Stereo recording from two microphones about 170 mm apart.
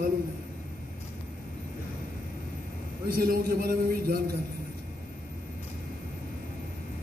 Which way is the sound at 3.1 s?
60° right (ahead or behind).